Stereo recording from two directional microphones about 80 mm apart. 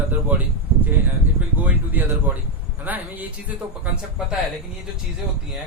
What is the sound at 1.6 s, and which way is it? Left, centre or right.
A man's voice, right.